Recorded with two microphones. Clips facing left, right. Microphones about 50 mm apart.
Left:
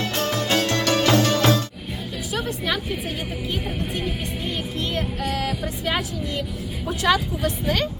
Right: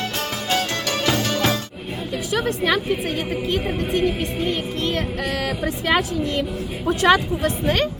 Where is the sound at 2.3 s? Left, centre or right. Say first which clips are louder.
Right 5 dB; right.